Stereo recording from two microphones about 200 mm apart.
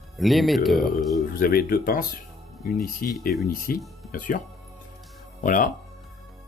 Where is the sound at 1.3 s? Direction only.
50° left (ahead or behind).